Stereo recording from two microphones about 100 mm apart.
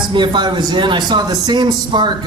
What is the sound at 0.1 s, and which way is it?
Speech, 50° right (ahead or behind).